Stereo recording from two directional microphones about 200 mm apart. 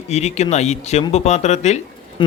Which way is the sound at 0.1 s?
35° left (ahead or behind).